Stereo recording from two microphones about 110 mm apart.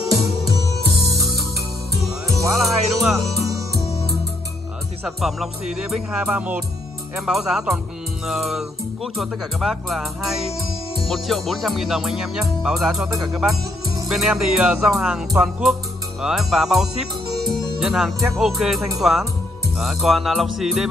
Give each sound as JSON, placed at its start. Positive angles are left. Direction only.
{"t": 0.0, "sound": "music", "side_deg": 0}
{"t": 5.0, "sound": "speech", "side_deg": -5}
{"t": 13.1, "sound": "music", "side_deg": -30}
{"t": 14.0, "sound": "speech", "side_deg": -5}